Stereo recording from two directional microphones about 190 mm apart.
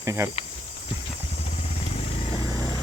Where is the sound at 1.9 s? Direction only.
30° left (ahead or behind).